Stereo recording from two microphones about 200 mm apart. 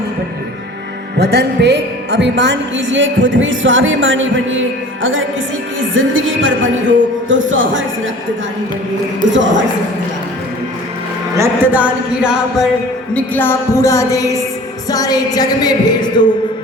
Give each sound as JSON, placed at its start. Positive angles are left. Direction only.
{"t": 1.2, "sound": "a woman's voice", "side_deg": -55}
{"t": 9.3, "sound": "a woman's voice", "side_deg": -65}
{"t": 11.3, "sound": "speech", "side_deg": -10}
{"t": 13.1, "sound": "a woman's voice", "side_deg": 10}
{"t": 14.8, "sound": "music", "side_deg": 20}